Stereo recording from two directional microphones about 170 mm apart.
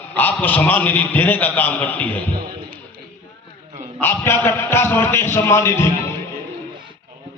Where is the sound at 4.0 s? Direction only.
15° left (ahead or behind).